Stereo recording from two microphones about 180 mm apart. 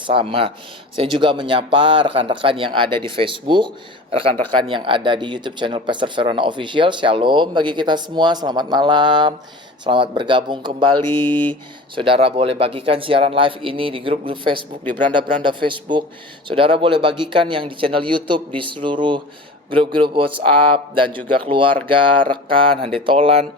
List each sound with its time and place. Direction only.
0.0 s speech: 30° right (ahead or behind)